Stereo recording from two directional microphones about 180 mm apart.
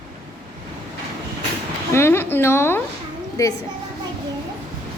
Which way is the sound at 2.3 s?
15° left (ahead or behind).